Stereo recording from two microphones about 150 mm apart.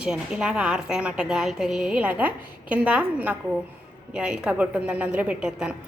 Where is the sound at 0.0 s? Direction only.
5° right (ahead or behind).